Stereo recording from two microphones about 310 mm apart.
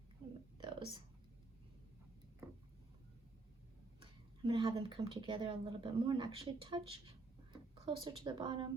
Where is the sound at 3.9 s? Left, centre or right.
Centre.